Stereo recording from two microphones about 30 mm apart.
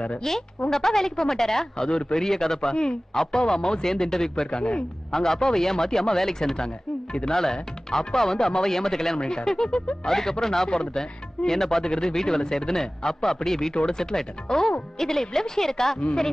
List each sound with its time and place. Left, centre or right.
0.3 s a woman's voice: centre
1.9 s a man's voice: left
2.1 s speech: centre
4.5 s a man's voice: left
5.1 s speech: centre
6.5 s speech: left
9.2 s speech: left
10.0 s a woman's voice: centre